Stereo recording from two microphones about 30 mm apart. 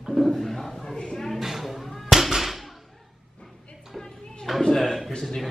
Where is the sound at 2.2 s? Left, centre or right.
Centre.